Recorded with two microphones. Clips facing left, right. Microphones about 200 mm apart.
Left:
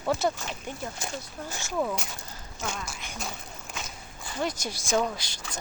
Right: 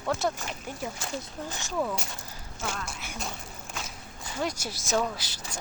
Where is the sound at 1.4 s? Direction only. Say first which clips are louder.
Even; 15° right (ahead or behind).